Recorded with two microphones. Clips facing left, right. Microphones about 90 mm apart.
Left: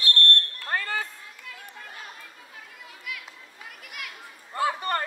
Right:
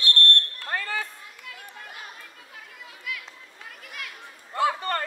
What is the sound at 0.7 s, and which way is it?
Basketball bounce, 40° left (ahead or behind).